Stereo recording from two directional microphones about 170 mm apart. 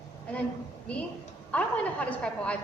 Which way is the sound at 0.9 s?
5° left (ahead or behind).